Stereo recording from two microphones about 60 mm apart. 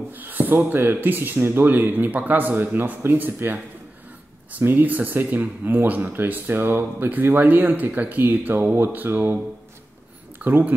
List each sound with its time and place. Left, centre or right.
0.1 s speech: right
10.4 s speech: right